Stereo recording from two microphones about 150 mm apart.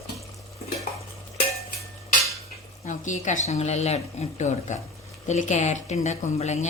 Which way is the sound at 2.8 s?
55° left (ahead or behind).